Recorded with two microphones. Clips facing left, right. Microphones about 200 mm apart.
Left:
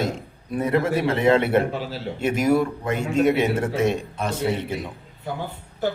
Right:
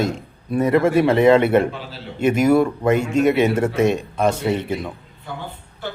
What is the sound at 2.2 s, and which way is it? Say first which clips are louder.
A man's voice: right 5 dB; 75° right (ahead or behind).